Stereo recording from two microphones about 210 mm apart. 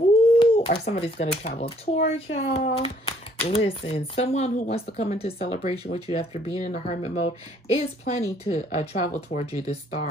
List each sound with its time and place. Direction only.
0.4 s speech: 30° left (ahead or behind)